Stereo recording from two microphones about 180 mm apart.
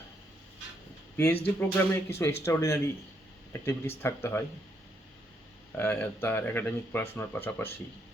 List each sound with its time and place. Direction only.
1.1 s speech: 10° left (ahead or behind)
5.7 s speech: 15° left (ahead or behind)